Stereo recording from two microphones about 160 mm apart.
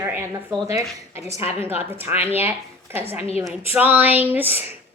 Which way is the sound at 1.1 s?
40° left (ahead or behind).